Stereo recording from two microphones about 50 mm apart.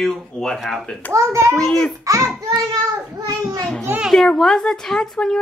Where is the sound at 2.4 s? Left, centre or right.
Right.